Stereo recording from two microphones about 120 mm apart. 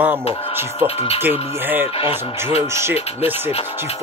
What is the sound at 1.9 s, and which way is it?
Speech, 55° left (ahead or behind).